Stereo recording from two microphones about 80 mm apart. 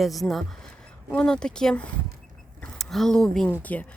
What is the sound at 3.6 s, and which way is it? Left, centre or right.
Speech, centre.